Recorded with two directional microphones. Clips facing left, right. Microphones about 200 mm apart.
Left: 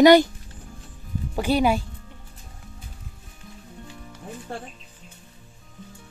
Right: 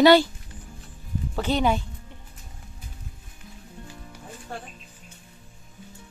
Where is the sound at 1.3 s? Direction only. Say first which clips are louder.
Left 3 dB; 10° left (ahead or behind).